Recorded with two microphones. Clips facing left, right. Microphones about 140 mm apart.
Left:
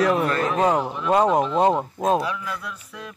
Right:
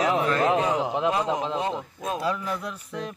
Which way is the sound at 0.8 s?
90° right.